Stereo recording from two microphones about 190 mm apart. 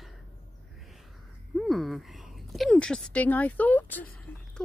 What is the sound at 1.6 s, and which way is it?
Speech, centre (ahead or behind).